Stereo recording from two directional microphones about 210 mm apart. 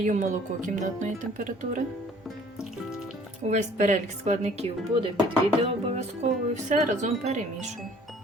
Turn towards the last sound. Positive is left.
turn(degrees=-35)  # may be behind; listen again after turning